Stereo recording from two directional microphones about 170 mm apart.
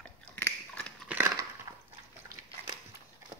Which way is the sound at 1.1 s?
15° right (ahead or behind).